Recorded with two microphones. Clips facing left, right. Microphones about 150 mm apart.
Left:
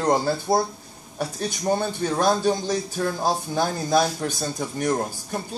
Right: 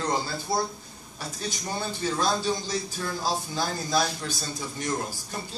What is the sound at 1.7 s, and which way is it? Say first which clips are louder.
Speech: left 7 dB; 55° left (ahead or behind).